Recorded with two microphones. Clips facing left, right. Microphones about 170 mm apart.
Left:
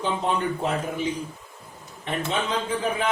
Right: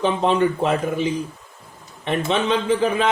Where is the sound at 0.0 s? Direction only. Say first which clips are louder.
Right 7 dB; 80° right.